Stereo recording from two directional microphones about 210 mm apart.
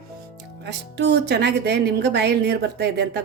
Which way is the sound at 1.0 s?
55° right (ahead or behind).